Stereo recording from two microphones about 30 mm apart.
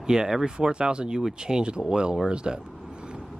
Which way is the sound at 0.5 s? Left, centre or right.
Right.